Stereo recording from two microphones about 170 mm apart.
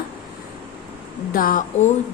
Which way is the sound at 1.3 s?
55° left (ahead or behind).